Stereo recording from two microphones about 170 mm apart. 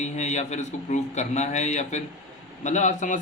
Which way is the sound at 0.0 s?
45° left (ahead or behind).